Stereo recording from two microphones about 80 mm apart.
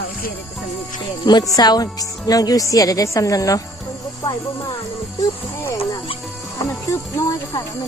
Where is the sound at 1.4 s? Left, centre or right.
Left.